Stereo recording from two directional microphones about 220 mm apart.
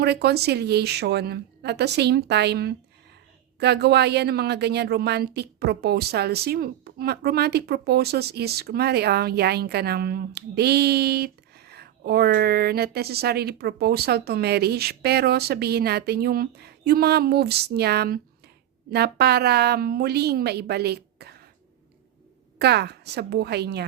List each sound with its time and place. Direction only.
0.0 s a woman's voice: 50° right (ahead or behind)
22.5 s a woman's voice: 50° right (ahead or behind)